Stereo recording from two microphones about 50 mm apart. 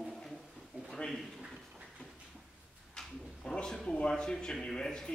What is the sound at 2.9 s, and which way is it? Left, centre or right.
Speech, centre.